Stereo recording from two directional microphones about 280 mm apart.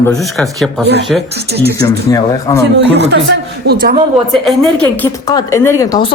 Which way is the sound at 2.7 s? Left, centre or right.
Right.